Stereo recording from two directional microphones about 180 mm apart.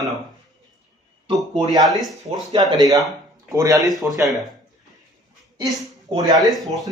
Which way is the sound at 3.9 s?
Centre (ahead or behind).